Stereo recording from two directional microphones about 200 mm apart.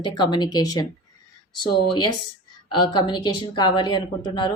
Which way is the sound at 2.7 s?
25° left (ahead or behind).